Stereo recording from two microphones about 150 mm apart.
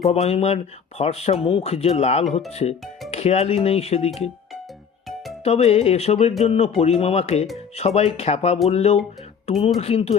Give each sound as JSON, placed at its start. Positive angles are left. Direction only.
{"t": 0.1, "sound": "speech", "side_deg": 45}
{"t": 5.0, "sound": "music", "side_deg": 0}
{"t": 5.4, "sound": "speech", "side_deg": 45}